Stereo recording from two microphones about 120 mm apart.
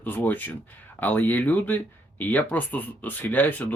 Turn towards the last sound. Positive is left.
turn(degrees=15)  # may be behind; listen again after turning